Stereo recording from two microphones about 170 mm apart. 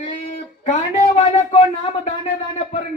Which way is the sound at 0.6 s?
45° left (ahead or behind).